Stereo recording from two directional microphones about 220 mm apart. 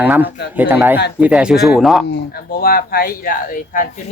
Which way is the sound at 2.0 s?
45° left (ahead or behind).